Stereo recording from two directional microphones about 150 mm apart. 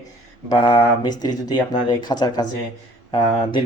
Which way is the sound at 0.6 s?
30° left (ahead or behind).